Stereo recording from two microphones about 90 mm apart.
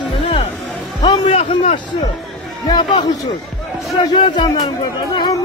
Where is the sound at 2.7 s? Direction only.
55° left (ahead or behind).